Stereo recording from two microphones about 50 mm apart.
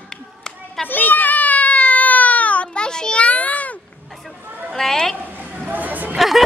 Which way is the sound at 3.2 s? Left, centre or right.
Left.